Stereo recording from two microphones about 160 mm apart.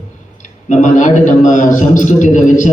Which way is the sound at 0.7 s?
50° left (ahead or behind).